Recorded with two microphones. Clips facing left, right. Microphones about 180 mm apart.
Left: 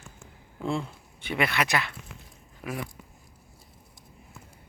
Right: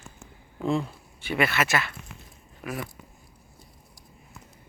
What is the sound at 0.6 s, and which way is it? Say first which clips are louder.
Speech: right 4 dB; 15° right (ahead or behind).